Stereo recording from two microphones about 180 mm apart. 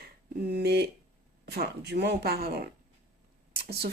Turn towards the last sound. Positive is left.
turn(degrees=-60)  # may be behind; listen again after turning